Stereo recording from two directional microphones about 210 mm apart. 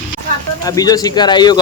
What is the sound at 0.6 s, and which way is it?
Speech, 15° left (ahead or behind).